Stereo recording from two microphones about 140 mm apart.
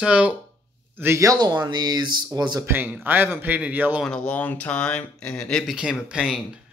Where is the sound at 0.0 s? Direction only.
10° right (ahead or behind); by 2.6 s 30° right (ahead or behind).